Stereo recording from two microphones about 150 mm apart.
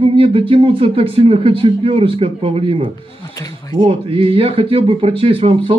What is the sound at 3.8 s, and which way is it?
A man's voice, 40° right (ahead or behind).